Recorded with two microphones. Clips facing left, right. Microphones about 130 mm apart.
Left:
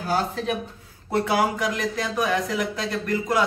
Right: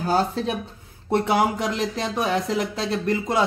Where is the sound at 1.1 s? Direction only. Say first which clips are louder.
Right 2 dB; 25° right (ahead or behind).